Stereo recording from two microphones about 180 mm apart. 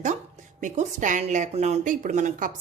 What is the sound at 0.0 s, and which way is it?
Speech, 45° right (ahead or behind).